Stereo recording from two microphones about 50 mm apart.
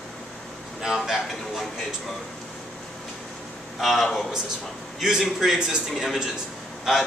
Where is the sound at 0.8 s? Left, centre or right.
Centre.